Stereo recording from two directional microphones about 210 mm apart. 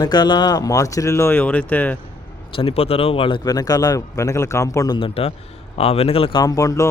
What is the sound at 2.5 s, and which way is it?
A man's voice, 30° left (ahead or behind).